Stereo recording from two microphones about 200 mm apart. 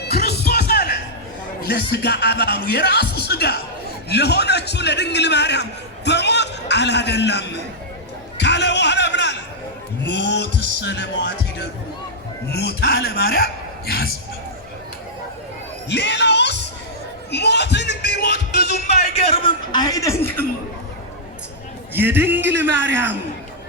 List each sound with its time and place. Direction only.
0.0 s music: 50° left (ahead or behind)
1.6 s a man's voice: 55° left (ahead or behind)
8.4 s a sound: 60° left (ahead or behind)
10.1 s a man's voice: 60° left (ahead or behind)
15.9 s speech: 60° left (ahead or behind)
17.3 s music: 55° left (ahead or behind)
19.1 s a sound: 30° left (ahead or behind); by 20.4 s 15° left (ahead or behind)
21.9 s a man's voice: 10° right (ahead or behind)